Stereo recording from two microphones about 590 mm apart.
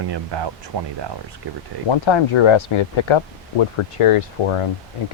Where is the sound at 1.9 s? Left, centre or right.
Left.